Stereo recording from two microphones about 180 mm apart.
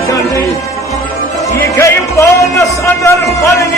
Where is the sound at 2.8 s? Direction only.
15° left (ahead or behind).